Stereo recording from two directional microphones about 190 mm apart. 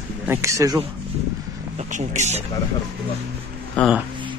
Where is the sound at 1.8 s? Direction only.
40° right (ahead or behind).